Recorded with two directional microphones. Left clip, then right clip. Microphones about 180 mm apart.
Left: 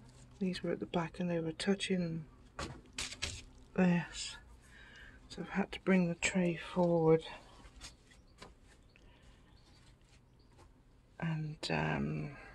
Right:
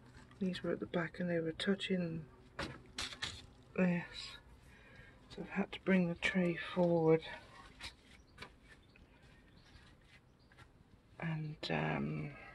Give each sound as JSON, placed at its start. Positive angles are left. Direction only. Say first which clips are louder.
{"t": 0.4, "sound": "speech", "louder": "left 1 dB", "side_deg": 5}
{"t": 3.7, "sound": "speech", "louder": "left 3 dB", "side_deg": 15}
{"t": 11.1, "sound": "speech", "louder": "left 2 dB", "side_deg": 10}